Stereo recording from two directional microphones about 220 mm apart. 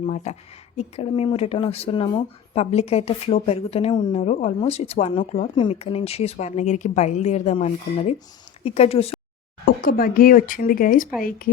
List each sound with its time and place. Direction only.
0.0 s speech: 30° left (ahead or behind)
9.6 s speech: 40° left (ahead or behind)